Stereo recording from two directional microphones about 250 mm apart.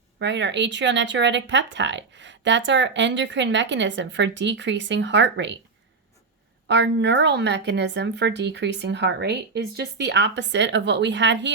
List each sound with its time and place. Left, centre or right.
0.2 s speech: right
6.7 s speech: right